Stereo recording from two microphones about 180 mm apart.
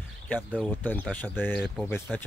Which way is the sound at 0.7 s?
10° left (ahead or behind).